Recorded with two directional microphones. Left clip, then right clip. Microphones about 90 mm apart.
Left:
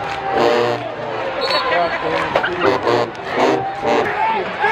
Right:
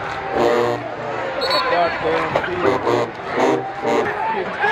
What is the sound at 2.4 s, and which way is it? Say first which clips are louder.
Music: left 2 dB; 35° left (ahead or behind).